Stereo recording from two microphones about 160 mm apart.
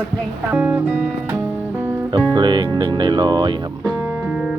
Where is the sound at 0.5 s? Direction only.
10° right (ahead or behind).